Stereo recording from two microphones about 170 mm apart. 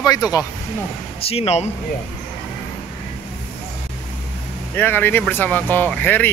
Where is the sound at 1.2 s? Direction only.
35° left (ahead or behind).